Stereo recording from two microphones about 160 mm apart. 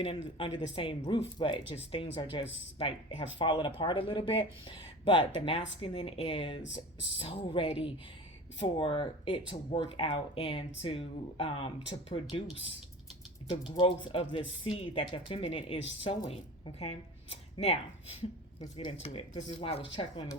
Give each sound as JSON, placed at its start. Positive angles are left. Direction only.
{"t": 0.0, "sound": "speech", "side_deg": 35}
{"t": 13.5, "sound": "speech", "side_deg": 30}